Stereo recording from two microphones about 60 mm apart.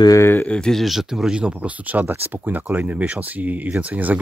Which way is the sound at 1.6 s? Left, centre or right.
Right.